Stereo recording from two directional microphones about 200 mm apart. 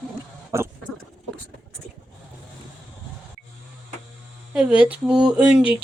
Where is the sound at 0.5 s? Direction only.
15° right (ahead or behind).